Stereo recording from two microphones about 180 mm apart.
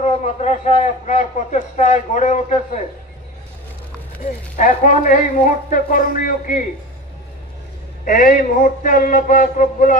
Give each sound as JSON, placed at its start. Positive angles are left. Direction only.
{"t": 0.0, "sound": "a man's voice", "side_deg": 40}
{"t": 4.2, "sound": "a man's voice", "side_deg": 45}
{"t": 8.0, "sound": "a man's voice", "side_deg": 50}